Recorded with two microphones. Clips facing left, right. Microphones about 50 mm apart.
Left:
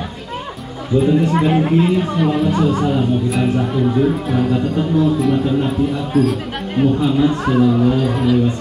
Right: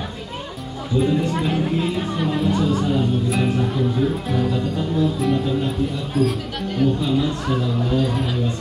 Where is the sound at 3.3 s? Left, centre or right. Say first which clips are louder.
Left 4 dB; centre.